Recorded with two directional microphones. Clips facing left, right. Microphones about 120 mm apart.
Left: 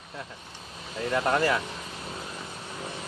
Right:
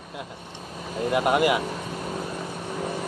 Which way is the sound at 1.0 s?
15° right (ahead or behind).